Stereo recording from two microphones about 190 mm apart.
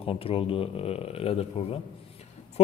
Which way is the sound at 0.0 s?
30° left (ahead or behind).